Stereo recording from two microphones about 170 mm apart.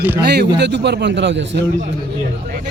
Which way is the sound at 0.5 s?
85° right.